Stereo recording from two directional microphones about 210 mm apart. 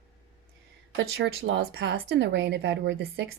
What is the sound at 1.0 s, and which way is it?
Speech, 60° right (ahead or behind).